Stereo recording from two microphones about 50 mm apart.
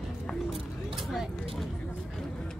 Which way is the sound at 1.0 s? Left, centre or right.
Centre.